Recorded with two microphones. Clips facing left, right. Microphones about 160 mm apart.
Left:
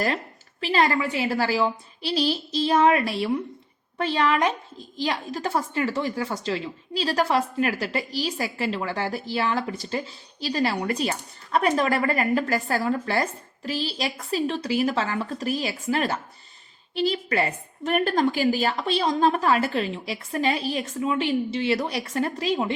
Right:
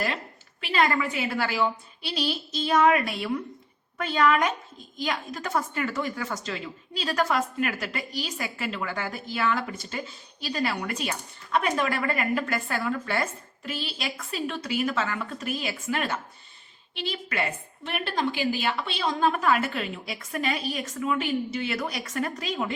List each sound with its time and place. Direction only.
0.6 s a woman's voice: 35° left (ahead or behind)